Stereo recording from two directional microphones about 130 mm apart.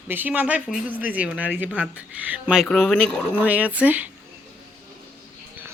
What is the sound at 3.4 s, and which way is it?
Speech, 10° right (ahead or behind).